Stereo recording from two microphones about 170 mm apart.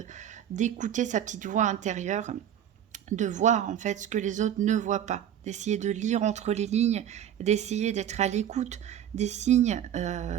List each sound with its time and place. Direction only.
0.5 s speech: 45° right (ahead or behind)